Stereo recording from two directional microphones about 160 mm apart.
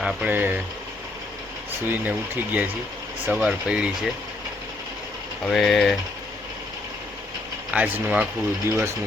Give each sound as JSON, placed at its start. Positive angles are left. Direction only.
{"t": 0.0, "sound": "speech", "side_deg": -10}
{"t": 1.9, "sound": "speech", "side_deg": -10}
{"t": 5.5, "sound": "speech", "side_deg": 0}
{"t": 7.7, "sound": "speech", "side_deg": -10}